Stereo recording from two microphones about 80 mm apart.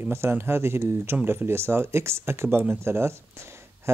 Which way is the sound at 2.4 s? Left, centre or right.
Right.